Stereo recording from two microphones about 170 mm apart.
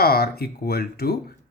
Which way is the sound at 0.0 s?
65° left (ahead or behind).